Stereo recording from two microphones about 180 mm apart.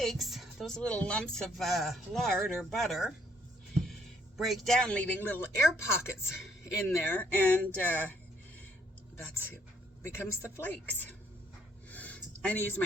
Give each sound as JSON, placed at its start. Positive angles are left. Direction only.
{"t": 0.0, "sound": "speech", "side_deg": 0}
{"t": 4.4, "sound": "a woman's voice", "side_deg": 0}
{"t": 9.1, "sound": "a woman's voice", "side_deg": 10}
{"t": 11.9, "sound": "a sound", "side_deg": 10}